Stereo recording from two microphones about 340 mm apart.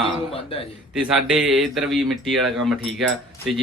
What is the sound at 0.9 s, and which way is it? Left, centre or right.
Speech, centre.